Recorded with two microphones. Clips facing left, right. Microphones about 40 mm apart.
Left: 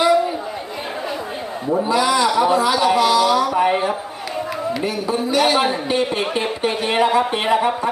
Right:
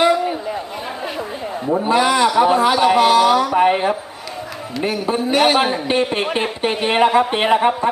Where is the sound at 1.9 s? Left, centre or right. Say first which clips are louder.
Right 3 dB; right.